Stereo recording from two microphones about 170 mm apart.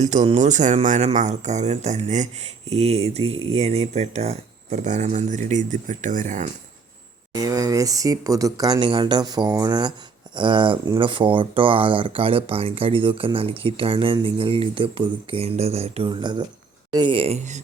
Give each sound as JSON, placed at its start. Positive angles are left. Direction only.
{"t": 0.0, "sound": "speech", "side_deg": -40}
{"t": 7.3, "sound": "speech", "side_deg": -20}